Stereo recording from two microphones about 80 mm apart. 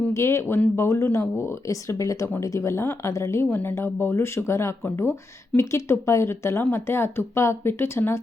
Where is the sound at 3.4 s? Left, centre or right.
Left.